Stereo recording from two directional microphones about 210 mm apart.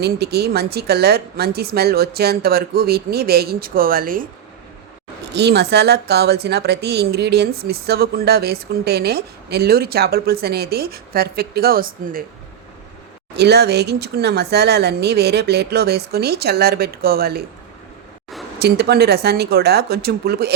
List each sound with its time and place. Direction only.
0.0 s a woman's voice: 50° right (ahead or behind)
5.3 s a woman's voice: 55° right (ahead or behind)
13.3 s a woman's voice: 50° right (ahead or behind)
18.6 s a woman's voice: 50° right (ahead or behind)